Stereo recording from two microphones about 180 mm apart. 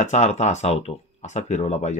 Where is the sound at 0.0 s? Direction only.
40° left (ahead or behind).